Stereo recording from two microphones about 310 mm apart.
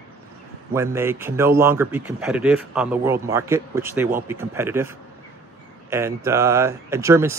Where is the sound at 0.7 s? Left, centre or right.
Centre.